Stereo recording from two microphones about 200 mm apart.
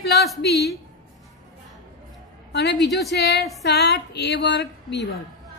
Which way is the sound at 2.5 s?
55° left (ahead or behind).